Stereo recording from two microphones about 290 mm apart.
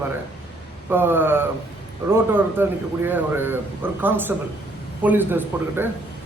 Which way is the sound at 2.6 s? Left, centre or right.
Centre.